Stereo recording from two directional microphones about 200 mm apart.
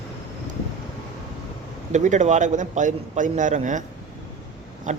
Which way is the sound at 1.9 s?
35° right (ahead or behind).